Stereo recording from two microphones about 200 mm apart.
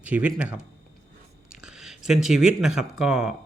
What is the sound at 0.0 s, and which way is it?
Speech, 5° right (ahead or behind).